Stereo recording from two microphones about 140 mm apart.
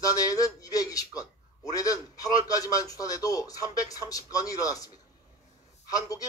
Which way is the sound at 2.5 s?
25° left (ahead or behind).